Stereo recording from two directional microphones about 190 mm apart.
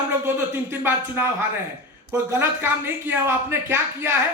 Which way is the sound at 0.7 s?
10° right (ahead or behind).